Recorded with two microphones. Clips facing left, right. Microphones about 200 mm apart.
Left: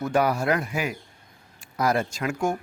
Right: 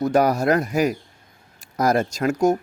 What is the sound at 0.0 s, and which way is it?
Speech, 40° right (ahead or behind).